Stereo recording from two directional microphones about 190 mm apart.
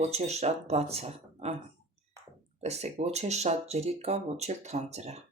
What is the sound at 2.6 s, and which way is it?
Speech, 35° right (ahead or behind).